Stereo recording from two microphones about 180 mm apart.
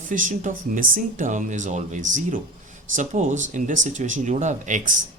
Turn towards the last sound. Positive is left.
turn(degrees=-45)  # may be behind; listen again after turning